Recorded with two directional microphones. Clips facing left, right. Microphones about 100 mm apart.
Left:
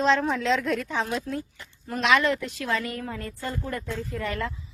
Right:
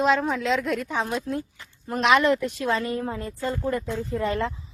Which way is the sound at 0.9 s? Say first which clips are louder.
Right 1 dB; 20° right (ahead or behind).